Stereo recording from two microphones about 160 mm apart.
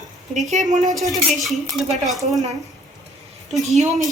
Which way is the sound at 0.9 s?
Centre (ahead or behind).